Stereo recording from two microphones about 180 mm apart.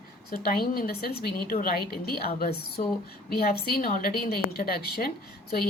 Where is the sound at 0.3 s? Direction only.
55° left (ahead or behind).